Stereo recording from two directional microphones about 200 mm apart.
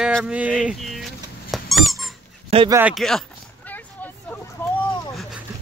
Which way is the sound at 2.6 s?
10° right (ahead or behind).